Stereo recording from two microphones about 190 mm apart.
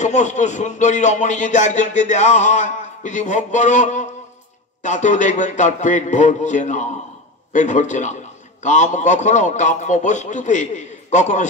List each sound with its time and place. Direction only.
0.0 s speech: 40° left (ahead or behind)